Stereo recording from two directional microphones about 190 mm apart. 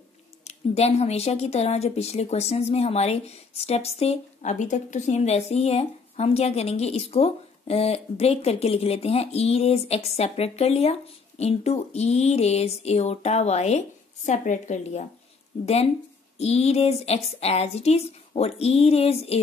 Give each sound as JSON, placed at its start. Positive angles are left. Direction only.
{"t": 0.4, "sound": "speech", "side_deg": 35}